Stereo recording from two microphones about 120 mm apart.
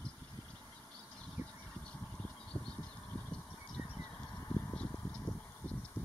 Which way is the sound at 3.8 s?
25° right (ahead or behind).